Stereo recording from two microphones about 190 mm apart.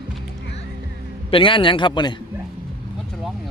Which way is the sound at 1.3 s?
25° left (ahead or behind).